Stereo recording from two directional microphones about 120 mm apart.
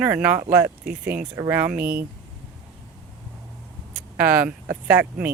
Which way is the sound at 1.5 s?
15° right (ahead or behind).